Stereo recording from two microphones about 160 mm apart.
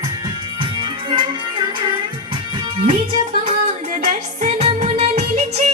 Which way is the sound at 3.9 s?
50° right (ahead or behind).